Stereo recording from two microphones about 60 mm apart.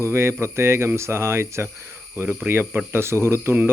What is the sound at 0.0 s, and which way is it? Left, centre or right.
Speech, right.